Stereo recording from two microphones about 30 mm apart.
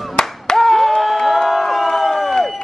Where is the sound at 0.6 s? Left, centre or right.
Centre.